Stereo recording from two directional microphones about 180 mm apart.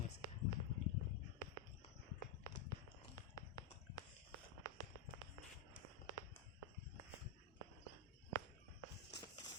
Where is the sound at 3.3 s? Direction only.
20° left (ahead or behind).